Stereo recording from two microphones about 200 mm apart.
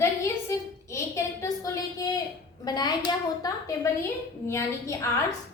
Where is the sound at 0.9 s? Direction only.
15° left (ahead or behind).